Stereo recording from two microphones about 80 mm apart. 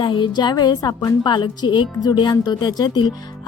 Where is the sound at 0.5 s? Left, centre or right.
Left.